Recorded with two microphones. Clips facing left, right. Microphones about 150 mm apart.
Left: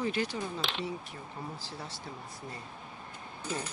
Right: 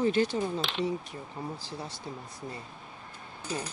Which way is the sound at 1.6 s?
15° right (ahead or behind).